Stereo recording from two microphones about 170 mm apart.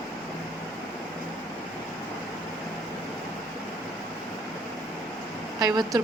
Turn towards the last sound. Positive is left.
turn(degrees=-20)  # may be behind; listen again after turning